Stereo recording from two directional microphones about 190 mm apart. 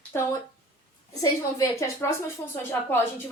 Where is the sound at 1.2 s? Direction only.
15° left (ahead or behind).